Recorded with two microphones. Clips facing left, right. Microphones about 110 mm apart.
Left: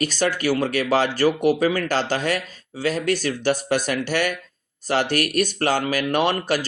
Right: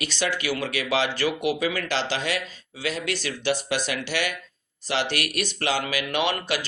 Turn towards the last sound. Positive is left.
turn(degrees=45)  # may be behind; listen again after turning